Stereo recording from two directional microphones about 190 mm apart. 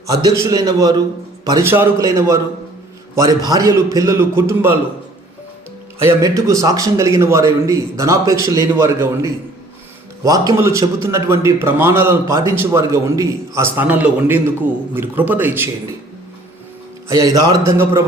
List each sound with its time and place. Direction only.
0.1 s a man's voice: 20° right (ahead or behind)
6.0 s a man's voice: 15° right (ahead or behind)
17.1 s a man's voice: 20° right (ahead or behind)